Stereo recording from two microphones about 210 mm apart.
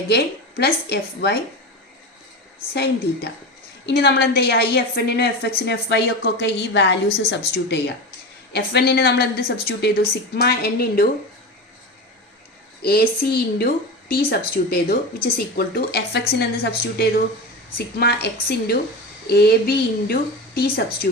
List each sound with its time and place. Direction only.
0.1 s a woman's voice: 50° left (ahead or behind)
2.7 s a woman's voice: 50° left (ahead or behind)
12.8 s a woman's voice: 45° left (ahead or behind)
17.7 s a woman's voice: 45° left (ahead or behind)